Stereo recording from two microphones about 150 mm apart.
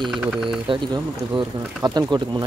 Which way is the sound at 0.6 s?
30° right (ahead or behind).